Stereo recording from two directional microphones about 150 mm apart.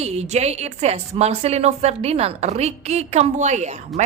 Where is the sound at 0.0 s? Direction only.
45° right (ahead or behind).